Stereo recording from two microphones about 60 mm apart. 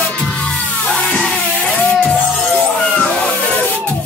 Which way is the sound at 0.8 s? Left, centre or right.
Centre.